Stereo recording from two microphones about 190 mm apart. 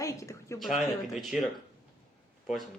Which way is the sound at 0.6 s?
Centre (ahead or behind).